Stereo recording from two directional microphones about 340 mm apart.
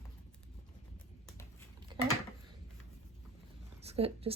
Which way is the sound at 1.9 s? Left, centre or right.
Centre.